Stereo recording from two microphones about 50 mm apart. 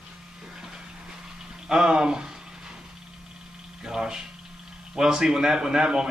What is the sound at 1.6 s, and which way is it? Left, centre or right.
Speech, centre.